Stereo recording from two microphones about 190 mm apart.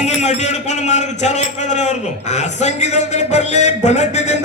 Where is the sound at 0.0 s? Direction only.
35° left (ahead or behind).